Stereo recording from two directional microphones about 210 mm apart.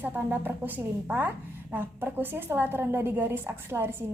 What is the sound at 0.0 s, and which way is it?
A woman's voice, 10° right (ahead or behind).